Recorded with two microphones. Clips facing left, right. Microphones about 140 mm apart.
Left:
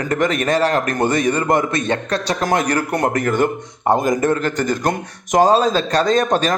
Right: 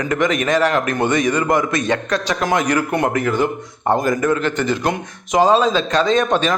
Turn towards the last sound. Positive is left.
turn(degrees=40)  # may be behind; listen again after turning